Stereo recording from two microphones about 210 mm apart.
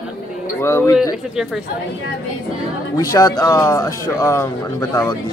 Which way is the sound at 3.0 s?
15° left (ahead or behind).